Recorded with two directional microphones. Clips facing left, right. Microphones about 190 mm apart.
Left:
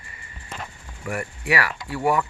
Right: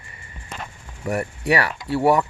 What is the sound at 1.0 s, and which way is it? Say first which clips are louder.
Speech: right 5 dB; 35° right (ahead or behind).